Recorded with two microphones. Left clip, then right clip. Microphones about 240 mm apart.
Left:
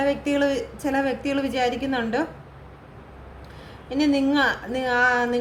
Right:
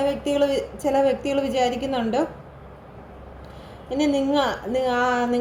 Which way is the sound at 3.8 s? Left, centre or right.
Left.